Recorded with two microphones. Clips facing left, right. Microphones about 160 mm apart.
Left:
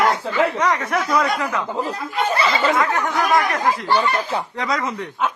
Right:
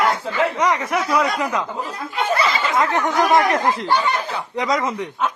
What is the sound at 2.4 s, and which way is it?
Chatter, 30° left (ahead or behind).